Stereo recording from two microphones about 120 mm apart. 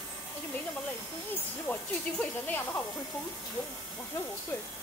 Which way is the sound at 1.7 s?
20° left (ahead or behind).